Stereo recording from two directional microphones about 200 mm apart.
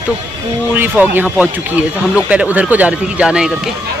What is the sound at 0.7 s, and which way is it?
Speech, 10° right (ahead or behind).